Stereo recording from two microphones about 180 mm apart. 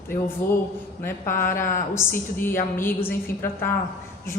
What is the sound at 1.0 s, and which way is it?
Speech, 15° left (ahead or behind).